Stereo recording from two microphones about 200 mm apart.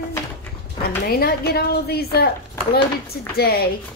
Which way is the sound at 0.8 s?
50° left (ahead or behind).